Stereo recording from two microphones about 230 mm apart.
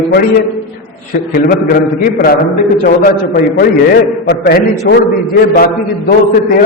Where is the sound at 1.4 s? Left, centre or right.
Left.